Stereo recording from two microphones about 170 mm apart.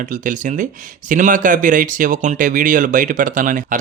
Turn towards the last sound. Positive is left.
turn(degrees=-50)  # may be behind; listen again after turning